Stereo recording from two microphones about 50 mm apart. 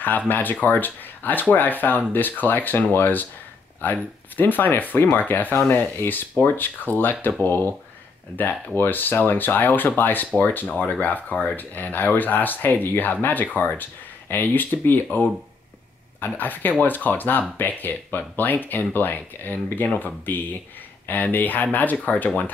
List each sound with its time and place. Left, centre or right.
0.3 s speech: left
16.3 s speech: left